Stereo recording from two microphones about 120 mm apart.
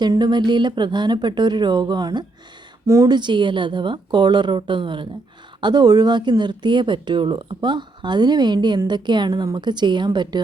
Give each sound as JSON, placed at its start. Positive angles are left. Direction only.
{"t": 0.0, "sound": "speech", "side_deg": -35}
{"t": 2.8, "sound": "speech", "side_deg": -25}
{"t": 3.2, "sound": "speech", "side_deg": -40}